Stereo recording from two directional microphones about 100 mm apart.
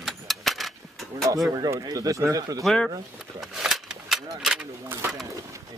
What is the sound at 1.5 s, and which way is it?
Speech, 35° right (ahead or behind).